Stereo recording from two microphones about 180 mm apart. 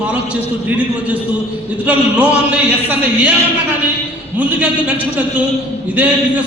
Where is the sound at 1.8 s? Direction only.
10° right (ahead or behind).